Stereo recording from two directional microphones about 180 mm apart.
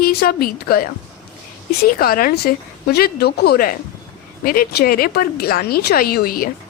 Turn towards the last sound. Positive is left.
turn(degrees=55)  # may be behind; listen again after turning